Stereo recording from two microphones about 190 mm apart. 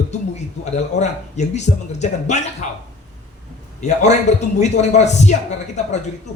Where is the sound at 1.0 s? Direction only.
35° left (ahead or behind).